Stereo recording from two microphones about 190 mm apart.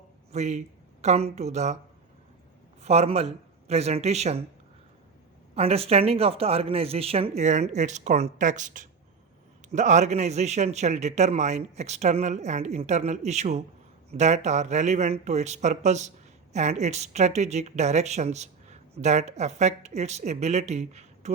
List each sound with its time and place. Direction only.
0.3 s a man's voice: 35° right (ahead or behind)
2.8 s speech: 35° right (ahead or behind)
5.5 s speech: 30° right (ahead or behind)